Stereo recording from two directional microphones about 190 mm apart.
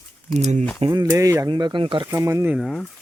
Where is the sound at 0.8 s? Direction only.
25° right (ahead or behind).